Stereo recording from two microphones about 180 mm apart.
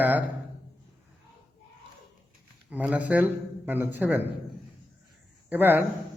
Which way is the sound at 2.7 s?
10° right (ahead or behind).